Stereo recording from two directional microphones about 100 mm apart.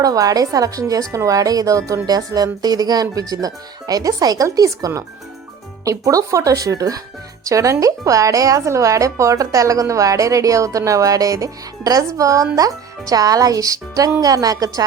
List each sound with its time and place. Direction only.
0.0 s a woman's voice: 35° right (ahead or behind)